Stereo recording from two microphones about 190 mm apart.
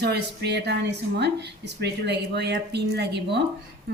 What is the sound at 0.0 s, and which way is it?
A woman's voice, 60° right (ahead or behind).